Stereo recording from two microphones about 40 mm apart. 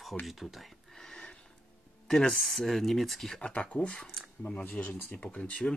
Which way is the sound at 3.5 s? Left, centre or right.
Left.